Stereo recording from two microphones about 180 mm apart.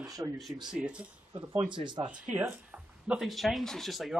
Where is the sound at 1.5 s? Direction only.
25° right (ahead or behind).